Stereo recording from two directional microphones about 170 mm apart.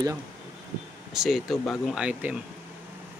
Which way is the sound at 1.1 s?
Centre (ahead or behind).